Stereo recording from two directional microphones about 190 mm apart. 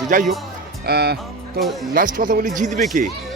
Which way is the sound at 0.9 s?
55° right (ahead or behind).